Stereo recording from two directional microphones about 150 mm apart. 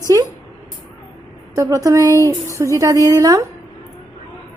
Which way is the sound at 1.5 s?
20° right (ahead or behind).